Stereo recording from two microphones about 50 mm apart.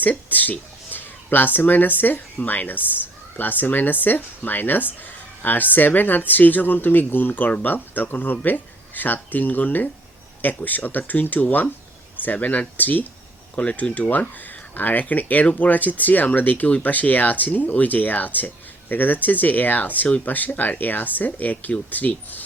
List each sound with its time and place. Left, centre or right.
0.0 s speech: left
13.6 s speech: left